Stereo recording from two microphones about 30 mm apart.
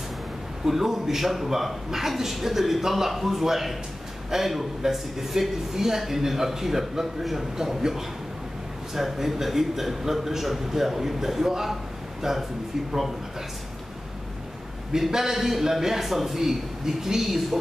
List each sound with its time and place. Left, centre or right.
0.7 s a man's voice: centre
14.9 s a man's voice: centre